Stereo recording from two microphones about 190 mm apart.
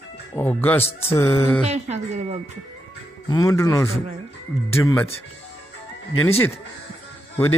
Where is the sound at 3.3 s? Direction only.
15° left (ahead or behind).